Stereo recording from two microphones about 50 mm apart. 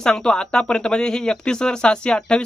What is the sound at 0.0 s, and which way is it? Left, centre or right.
Speech, centre.